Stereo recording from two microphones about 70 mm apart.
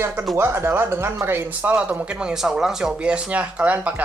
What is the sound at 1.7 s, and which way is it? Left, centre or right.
A woman's voice, centre.